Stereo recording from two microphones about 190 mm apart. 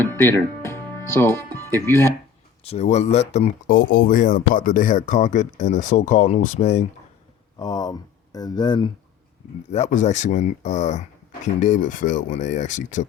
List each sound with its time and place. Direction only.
0.0 s speech: 15° left (ahead or behind)
2.6 s speech: 35° left (ahead or behind)
7.6 s speech: 20° left (ahead or behind)
9.6 s speech: 35° left (ahead or behind)